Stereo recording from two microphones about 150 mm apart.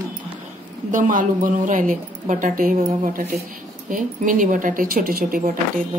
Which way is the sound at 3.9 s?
60° right (ahead or behind).